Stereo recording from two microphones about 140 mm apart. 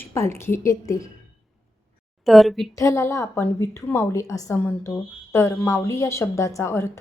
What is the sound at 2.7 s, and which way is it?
A woman's voice, 20° left (ahead or behind).